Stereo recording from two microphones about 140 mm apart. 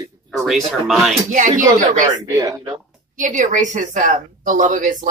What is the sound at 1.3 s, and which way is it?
Speech, 65° right (ahead or behind).